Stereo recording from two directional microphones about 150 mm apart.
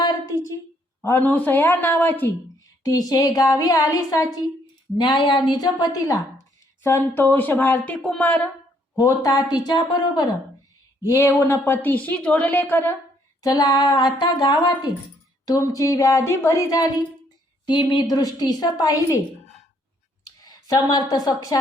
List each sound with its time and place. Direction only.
0.0 s a sound: 25° left (ahead or behind)
1.0 s a woman's voice: 15° left (ahead or behind)
2.8 s a woman's voice: 25° left (ahead or behind)
9.0 s a woman's voice: 25° left (ahead or behind)
13.4 s a woman's voice: 25° left (ahead or behind)
20.2 s speech: 25° left (ahead or behind)